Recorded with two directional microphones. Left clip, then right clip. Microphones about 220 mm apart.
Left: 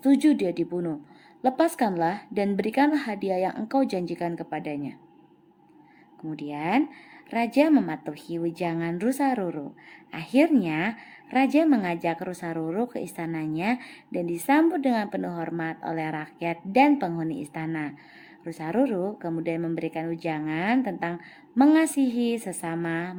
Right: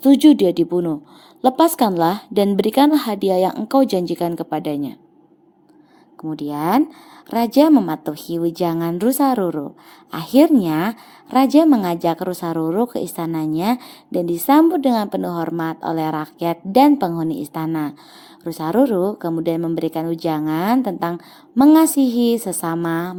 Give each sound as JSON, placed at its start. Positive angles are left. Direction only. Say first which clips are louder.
{"t": 0.0, "sound": "a woman's voice", "louder": "right 9 dB", "side_deg": -30}
{"t": 6.2, "sound": "a woman's voice", "louder": "right 8 dB", "side_deg": -30}